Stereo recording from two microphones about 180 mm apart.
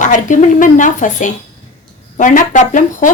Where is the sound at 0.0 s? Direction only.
45° left (ahead or behind).